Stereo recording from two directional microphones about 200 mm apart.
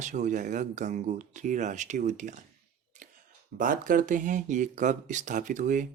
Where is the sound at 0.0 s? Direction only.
40° right (ahead or behind).